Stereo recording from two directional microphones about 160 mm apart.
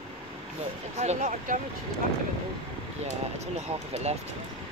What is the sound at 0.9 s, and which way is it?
Speech, 45° right (ahead or behind).